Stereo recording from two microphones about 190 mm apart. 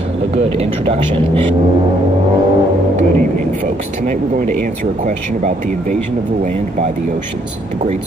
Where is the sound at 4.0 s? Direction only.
40° right (ahead or behind).